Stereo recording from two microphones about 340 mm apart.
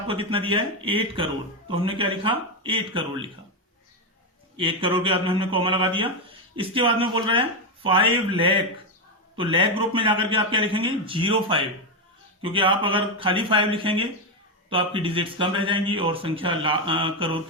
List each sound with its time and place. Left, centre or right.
0.1 s speech: centre
4.5 s speech: centre